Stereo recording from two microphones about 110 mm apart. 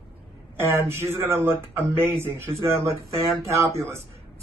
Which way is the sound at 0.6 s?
25° right (ahead or behind).